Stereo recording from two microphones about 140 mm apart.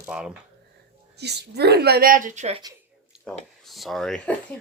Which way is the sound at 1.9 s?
85° right.